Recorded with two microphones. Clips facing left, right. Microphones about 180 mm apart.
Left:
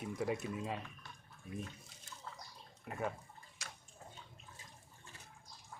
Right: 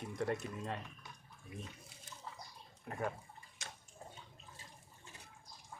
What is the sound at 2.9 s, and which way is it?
Speech, 5° left (ahead or behind).